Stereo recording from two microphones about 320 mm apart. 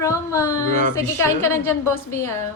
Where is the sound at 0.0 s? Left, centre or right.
Centre.